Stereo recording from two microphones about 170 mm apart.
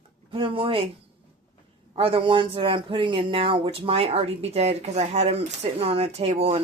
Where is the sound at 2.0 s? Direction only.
30° right (ahead or behind).